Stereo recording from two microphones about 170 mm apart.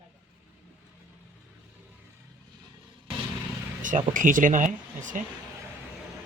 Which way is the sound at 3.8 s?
50° right (ahead or behind).